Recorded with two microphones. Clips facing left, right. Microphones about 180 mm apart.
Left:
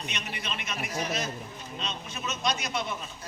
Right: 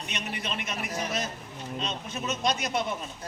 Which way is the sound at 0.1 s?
45° right (ahead or behind).